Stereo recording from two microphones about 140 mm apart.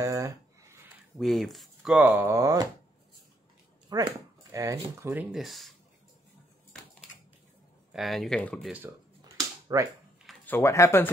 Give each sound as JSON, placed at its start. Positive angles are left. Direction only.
{"t": 0.0, "sound": "a sound", "side_deg": -20}
{"t": 1.1, "sound": "speech", "side_deg": 0}
{"t": 2.0, "sound": "speech", "side_deg": -15}
{"t": 2.2, "sound": "speech", "side_deg": -25}
{"t": 3.9, "sound": "speech", "side_deg": -25}
{"t": 5.3, "sound": "speech", "side_deg": 0}
{"t": 7.9, "sound": "speech", "side_deg": 0}
{"t": 9.2, "sound": "a sound", "side_deg": -25}
{"t": 10.4, "sound": "speech", "side_deg": 15}